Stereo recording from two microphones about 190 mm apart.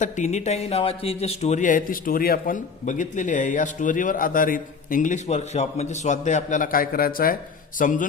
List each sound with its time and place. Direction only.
0.0 s a man's voice: 40° left (ahead or behind)